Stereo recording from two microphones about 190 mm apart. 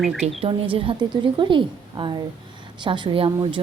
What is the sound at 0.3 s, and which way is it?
A woman's voice, 30° right (ahead or behind).